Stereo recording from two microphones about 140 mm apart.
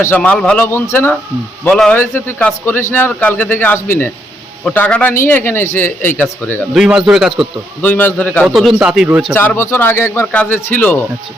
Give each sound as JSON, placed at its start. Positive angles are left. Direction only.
{"t": 0.0, "sound": "a man's voice", "side_deg": 10}
{"t": 6.7, "sound": "speech", "side_deg": -5}
{"t": 7.8, "sound": "a man's voice", "side_deg": 15}
{"t": 8.4, "sound": "speech", "side_deg": -5}
{"t": 9.6, "sound": "a man's voice", "side_deg": 15}